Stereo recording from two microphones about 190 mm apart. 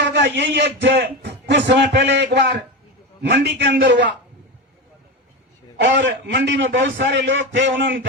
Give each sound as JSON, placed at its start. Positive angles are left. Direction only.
{"t": 0.0, "sound": "a man's voice", "side_deg": -65}
{"t": 5.8, "sound": "a man's voice", "side_deg": -75}